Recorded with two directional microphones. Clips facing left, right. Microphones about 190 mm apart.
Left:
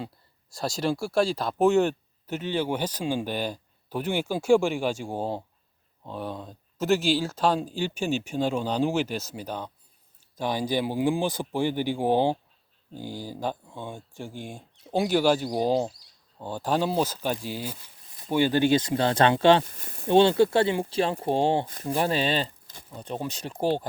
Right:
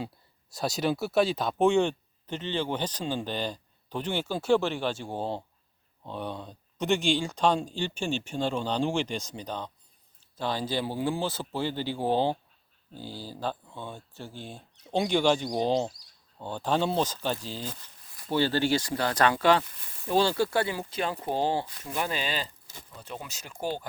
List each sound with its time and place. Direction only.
0.5 s speech: centre (ahead or behind); by 21.7 s 25° left (ahead or behind)
21.7 s speech: 40° left (ahead or behind)